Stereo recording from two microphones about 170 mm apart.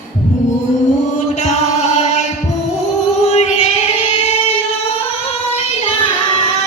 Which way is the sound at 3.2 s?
40° left (ahead or behind).